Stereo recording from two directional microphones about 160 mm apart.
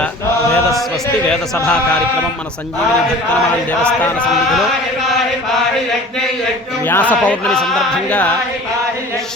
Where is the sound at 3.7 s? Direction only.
10° left (ahead or behind).